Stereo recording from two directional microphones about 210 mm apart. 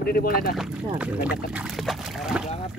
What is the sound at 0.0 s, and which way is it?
Speech, 45° left (ahead or behind).